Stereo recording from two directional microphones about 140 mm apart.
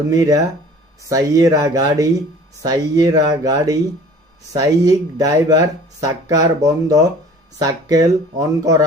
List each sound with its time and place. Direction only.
0.1 s speech: 25° right (ahead or behind)